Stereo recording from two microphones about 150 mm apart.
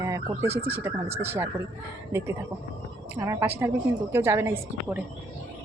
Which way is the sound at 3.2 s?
15° right (ahead or behind).